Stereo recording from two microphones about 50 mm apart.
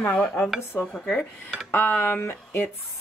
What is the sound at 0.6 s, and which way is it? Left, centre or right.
A woman's voice, left.